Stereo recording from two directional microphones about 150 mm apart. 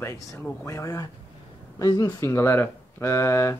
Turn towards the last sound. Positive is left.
turn(degrees=20)  # may be behind; listen again after turning